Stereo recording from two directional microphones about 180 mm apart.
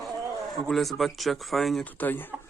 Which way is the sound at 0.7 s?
Centre (ahead or behind).